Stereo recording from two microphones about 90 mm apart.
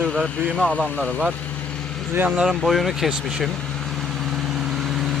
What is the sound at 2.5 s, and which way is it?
Speech, centre (ahead or behind).